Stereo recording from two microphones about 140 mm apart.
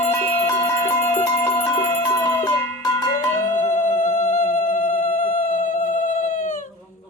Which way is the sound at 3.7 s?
65° left (ahead or behind).